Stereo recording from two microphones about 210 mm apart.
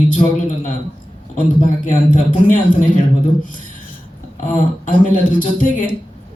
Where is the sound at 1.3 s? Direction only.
40° left (ahead or behind).